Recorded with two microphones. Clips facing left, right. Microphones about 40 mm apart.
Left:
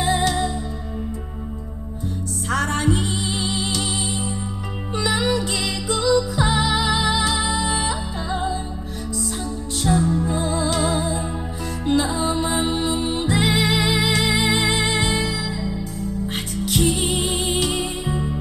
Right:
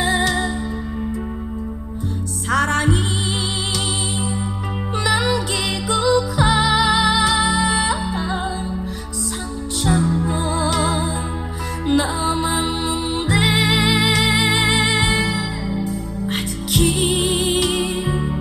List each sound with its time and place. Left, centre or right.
0.0 s music: right
2.5 s music: right
9.8 s music: right